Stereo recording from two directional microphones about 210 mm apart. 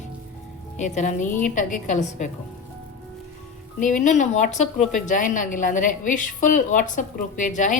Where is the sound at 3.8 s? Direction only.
35° left (ahead or behind).